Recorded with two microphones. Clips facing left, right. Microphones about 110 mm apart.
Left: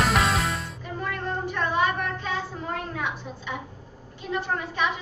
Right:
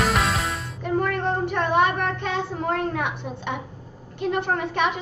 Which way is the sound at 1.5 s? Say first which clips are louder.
Right 3 dB; 65° right (ahead or behind).